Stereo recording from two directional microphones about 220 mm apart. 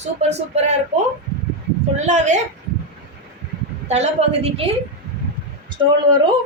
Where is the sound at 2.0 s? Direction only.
30° right (ahead or behind).